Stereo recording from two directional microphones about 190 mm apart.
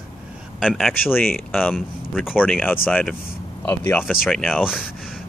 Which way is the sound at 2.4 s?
10° left (ahead or behind).